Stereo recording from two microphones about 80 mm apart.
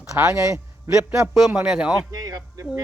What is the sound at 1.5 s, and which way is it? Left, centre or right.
Speech, centre.